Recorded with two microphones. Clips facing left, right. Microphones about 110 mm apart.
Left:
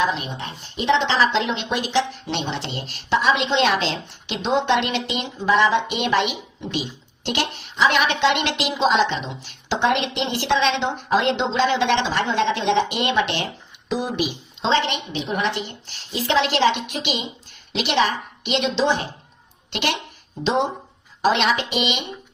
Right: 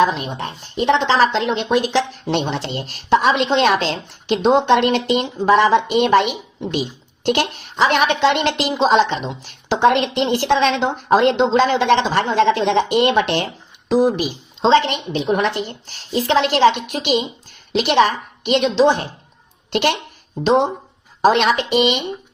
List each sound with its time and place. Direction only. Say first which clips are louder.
0.0 s a woman's voice: right 6 dB; 45° right (ahead or behind)